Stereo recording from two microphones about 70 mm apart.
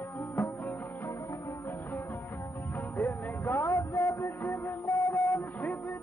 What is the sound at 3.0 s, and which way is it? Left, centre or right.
Music, left.